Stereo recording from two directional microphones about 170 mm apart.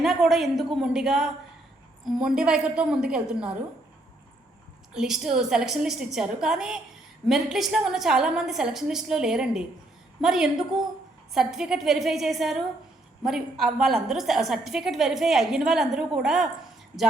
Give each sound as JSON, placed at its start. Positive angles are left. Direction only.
{"t": 0.0, "sound": "a woman's voice", "side_deg": 0}
{"t": 4.9, "sound": "a woman's voice", "side_deg": 0}